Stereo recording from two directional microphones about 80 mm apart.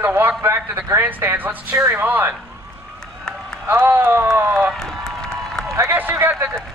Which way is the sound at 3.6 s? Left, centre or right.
Right.